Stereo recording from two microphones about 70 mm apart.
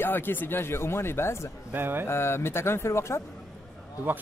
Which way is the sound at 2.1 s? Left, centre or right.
Left.